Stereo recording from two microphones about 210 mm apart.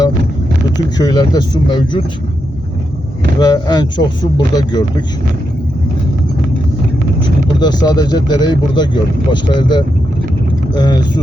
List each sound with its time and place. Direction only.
0.9 s speech: 20° left (ahead or behind)
3.4 s speech: 20° left (ahead or behind)
7.6 s speech: 20° left (ahead or behind)